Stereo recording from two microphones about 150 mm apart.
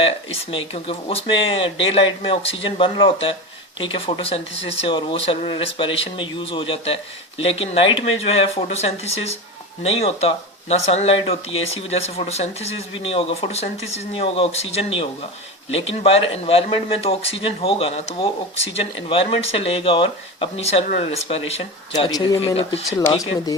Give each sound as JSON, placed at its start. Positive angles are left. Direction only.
{"t": 0.5, "sound": "speech", "side_deg": 40}
{"t": 21.9, "sound": "speech", "side_deg": 30}